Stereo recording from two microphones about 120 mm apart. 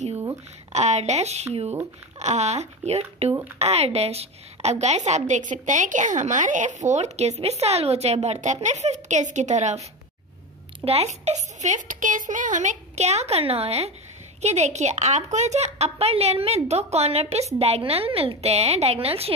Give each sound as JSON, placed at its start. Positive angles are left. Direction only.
{"t": 0.7, "sound": "a woman's voice", "side_deg": -70}
{"t": 10.9, "sound": "a woman's voice", "side_deg": -60}
{"t": 14.4, "sound": "a woman's voice", "side_deg": -70}